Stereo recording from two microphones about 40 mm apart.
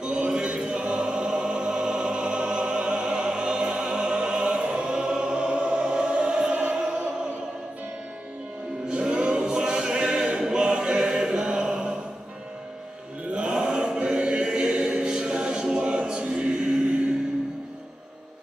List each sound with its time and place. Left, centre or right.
0.0 s choir: right
8.8 s music: right
13.3 s chant: right
16.3 s choir: right